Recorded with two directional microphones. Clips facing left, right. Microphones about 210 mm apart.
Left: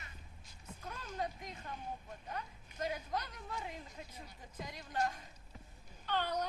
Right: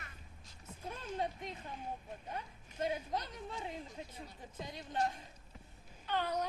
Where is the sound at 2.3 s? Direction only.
25° right (ahead or behind).